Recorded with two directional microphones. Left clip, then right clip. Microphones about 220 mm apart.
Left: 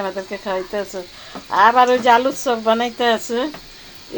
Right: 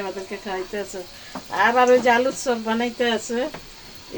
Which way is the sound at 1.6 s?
20° left (ahead or behind).